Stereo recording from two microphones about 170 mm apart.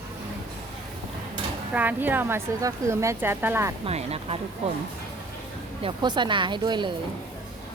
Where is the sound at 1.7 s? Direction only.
10° right (ahead or behind).